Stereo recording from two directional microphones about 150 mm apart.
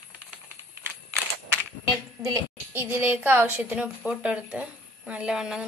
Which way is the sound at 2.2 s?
25° right (ahead or behind).